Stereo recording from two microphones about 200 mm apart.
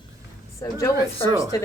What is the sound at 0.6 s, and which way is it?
Speech, 15° left (ahead or behind).